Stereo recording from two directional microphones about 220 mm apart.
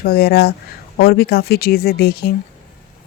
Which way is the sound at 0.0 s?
45° left (ahead or behind).